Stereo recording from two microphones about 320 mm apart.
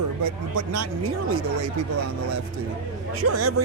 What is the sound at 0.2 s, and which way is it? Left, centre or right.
Speech, right.